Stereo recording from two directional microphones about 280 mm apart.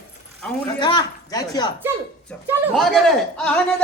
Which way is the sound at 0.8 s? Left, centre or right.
Centre.